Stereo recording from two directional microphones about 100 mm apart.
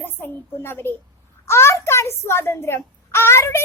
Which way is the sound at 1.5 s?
25° left (ahead or behind).